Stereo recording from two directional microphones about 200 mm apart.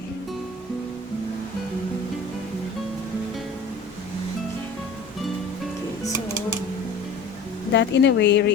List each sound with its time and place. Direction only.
7.7 s speech: 60° left (ahead or behind)